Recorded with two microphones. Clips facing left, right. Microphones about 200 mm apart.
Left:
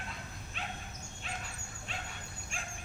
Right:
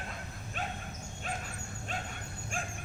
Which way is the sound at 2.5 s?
50° right (ahead or behind).